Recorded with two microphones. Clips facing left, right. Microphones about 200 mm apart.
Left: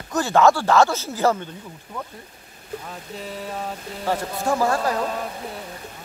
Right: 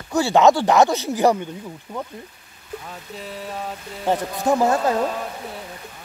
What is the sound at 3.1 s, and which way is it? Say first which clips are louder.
Speech: even; centre (ahead or behind).